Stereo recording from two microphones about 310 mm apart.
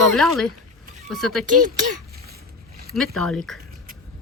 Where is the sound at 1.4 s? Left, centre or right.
Right.